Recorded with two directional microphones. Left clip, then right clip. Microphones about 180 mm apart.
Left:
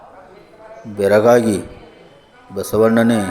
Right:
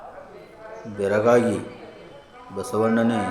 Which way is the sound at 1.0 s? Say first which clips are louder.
Left 7 dB; 30° left (ahead or behind).